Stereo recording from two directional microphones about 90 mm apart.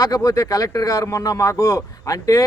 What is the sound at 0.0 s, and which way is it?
A man's voice, 40° left (ahead or behind).